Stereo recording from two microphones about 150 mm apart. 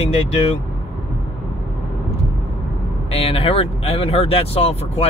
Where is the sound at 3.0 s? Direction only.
40° left (ahead or behind).